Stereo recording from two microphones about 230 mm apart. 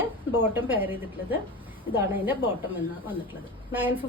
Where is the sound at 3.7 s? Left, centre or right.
Centre.